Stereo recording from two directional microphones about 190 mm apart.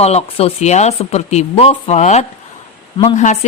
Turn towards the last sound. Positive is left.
turn(degrees=35)  # may be behind; listen again after turning